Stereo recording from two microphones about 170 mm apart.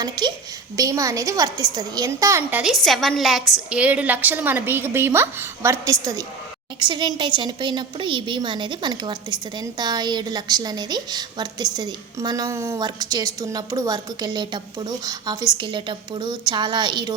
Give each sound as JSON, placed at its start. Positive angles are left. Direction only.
{"t": 0.0, "sound": "a woman's voice", "side_deg": -25}